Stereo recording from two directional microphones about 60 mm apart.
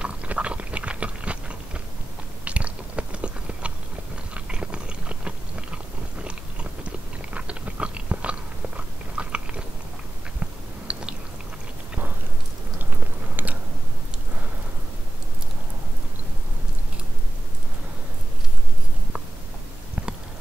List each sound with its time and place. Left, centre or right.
0.0 s a sound: right
2.4 s biting: right
10.9 s chewing: centre